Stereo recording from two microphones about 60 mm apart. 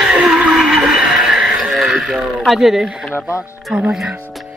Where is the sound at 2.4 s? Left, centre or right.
Centre.